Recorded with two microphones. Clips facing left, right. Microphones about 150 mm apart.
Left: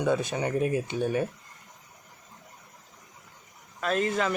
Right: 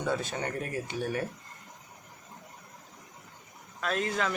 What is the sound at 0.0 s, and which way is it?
Speech, 15° left (ahead or behind).